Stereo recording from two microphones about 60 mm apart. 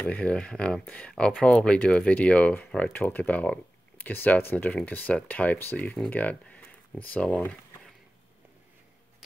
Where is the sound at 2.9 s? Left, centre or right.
Left.